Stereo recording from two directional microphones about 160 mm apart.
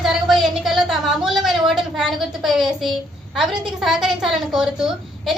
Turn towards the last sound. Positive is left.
turn(degrees=-5)  # may be behind; listen again after turning